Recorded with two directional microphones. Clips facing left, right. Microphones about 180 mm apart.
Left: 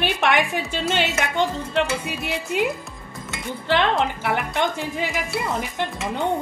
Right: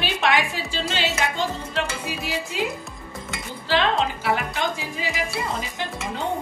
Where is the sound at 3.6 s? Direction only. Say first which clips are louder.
Left 1 dB; 60° left (ahead or behind).